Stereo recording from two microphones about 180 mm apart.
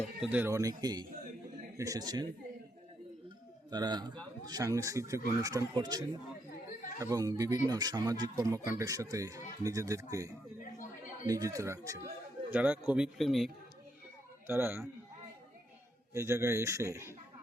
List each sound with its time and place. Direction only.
0.0 s speech: 5° right (ahead or behind); by 2.3 s 20° right (ahead or behind)
3.7 s speech: 25° right (ahead or behind); by 13.5 s centre (ahead or behind)
14.4 s speech: 10° right (ahead or behind)
16.1 s speech: 15° right (ahead or behind)